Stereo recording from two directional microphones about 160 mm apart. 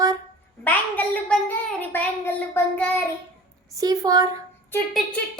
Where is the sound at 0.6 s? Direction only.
10° left (ahead or behind).